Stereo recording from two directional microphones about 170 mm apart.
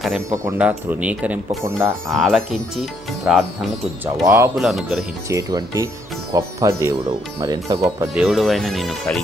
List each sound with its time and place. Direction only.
0.6 s speech: 10° right (ahead or behind)
2.0 s speech: centre (ahead or behind)
4.0 s speech: 15° right (ahead or behind)
4.5 s speech: centre (ahead or behind)
5.3 s speech: 20° right (ahead or behind)
8.1 s speech: 5° right (ahead or behind)